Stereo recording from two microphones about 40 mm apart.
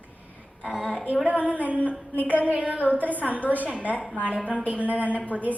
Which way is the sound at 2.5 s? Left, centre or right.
Right.